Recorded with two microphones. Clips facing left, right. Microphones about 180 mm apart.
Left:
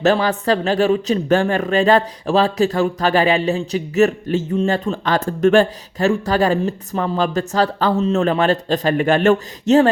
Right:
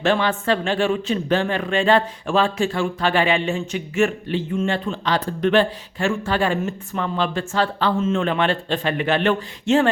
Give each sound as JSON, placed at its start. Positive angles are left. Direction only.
{"t": 0.0, "sound": "speech", "side_deg": 40}